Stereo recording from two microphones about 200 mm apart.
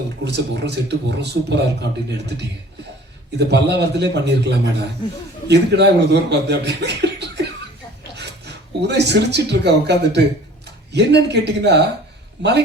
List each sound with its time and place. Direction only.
0.3 s a man's voice: 60° right (ahead or behind)